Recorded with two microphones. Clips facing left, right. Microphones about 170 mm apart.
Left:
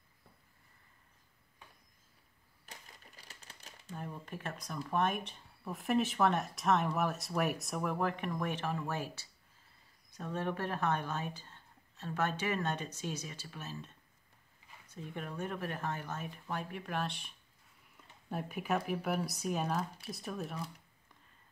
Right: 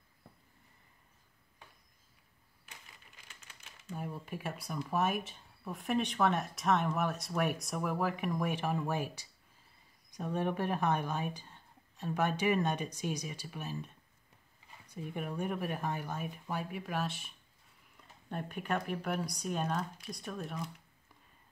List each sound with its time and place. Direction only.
2.6 s typewriter: 40° left (ahead or behind)
3.9 s speech: 10° right (ahead or behind)